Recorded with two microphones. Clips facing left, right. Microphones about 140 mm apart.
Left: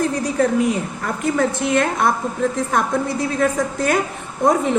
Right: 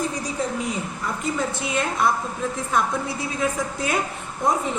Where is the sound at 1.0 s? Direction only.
60° left (ahead or behind).